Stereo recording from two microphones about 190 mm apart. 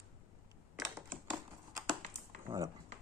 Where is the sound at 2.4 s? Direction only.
15° right (ahead or behind).